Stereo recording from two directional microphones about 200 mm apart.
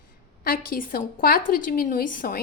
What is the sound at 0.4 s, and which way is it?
A woman's voice, 45° left (ahead or behind).